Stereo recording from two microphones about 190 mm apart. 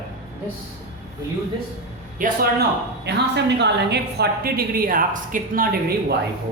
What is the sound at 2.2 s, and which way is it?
Speech, 45° right (ahead or behind).